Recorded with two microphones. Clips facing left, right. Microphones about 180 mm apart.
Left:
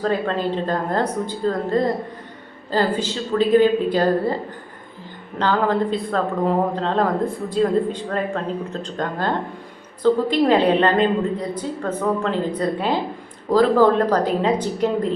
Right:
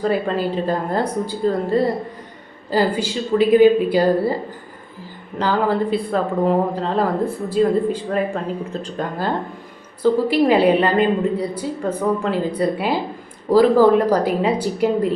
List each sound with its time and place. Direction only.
0.0 s a woman's voice: 10° right (ahead or behind)
5.4 s a woman's voice: 10° right (ahead or behind)